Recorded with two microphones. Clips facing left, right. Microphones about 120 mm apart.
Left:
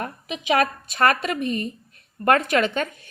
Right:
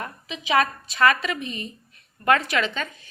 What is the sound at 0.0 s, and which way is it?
A woman's voice, 55° left (ahead or behind).